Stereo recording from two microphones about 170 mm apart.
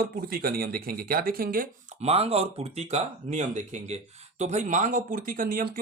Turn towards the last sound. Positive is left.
turn(degrees=-55)  # may be behind; listen again after turning